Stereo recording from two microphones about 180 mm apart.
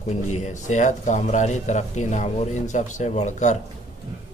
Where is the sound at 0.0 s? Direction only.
40° left (ahead or behind).